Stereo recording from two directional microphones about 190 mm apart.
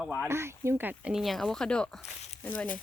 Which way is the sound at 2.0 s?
35° left (ahead or behind).